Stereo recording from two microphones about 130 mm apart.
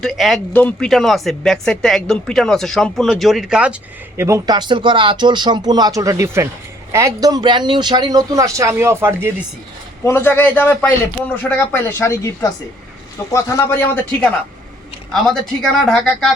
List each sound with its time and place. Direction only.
0.0 s speech: centre (ahead or behind)
0.5 s speech: 15° left (ahead or behind)
0.9 s speech: centre (ahead or behind)
4.2 s speech: 25° right (ahead or behind)
10.0 s a man's voice: 20° left (ahead or behind)
15.1 s speech: 5° left (ahead or behind)